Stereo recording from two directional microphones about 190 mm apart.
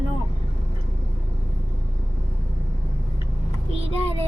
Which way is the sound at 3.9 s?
30° right (ahead or behind).